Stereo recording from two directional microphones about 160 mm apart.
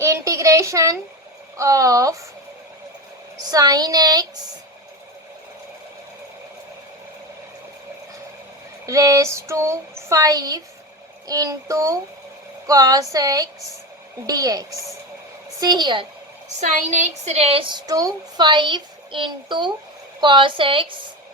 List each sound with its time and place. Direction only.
0.0 s a sound: 20° right (ahead or behind)
1.5 s a woman's voice: 20° right (ahead or behind)
3.5 s a woman's voice: 25° right (ahead or behind)
8.9 s a woman's voice: 20° right (ahead or behind)
16.6 s a woman's voice: 50° right (ahead or behind); by 20.8 s 30° right (ahead or behind)